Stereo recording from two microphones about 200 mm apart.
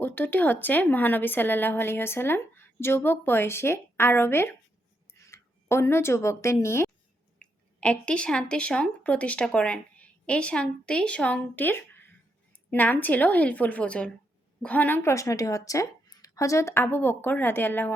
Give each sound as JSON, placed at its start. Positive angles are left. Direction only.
{"t": 0.0, "sound": "speech", "side_deg": 10}